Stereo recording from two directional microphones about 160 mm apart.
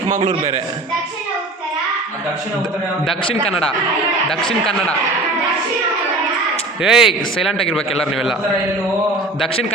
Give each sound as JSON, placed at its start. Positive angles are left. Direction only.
{"t": 0.2, "sound": "a man's voice", "side_deg": -35}
{"t": 3.4, "sound": "speech", "side_deg": 35}
{"t": 4.3, "sound": "speech", "side_deg": 5}
{"t": 6.8, "sound": "speech", "side_deg": -5}